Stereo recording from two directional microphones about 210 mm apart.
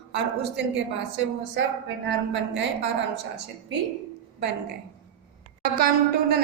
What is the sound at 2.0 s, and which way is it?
Speech, 55° right (ahead or behind).